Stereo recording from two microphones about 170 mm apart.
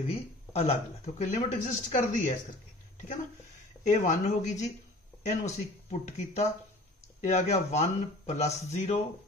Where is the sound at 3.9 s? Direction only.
45° left (ahead or behind).